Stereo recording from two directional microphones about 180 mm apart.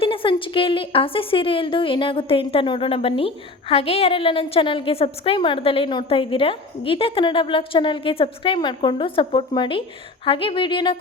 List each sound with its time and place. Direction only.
0.0 s a woman's voice: 30° left (ahead or behind)